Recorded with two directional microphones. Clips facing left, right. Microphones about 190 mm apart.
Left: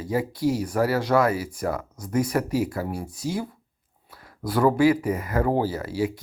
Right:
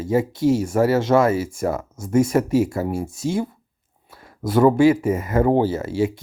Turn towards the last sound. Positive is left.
turn(degrees=-25)  # may be behind; listen again after turning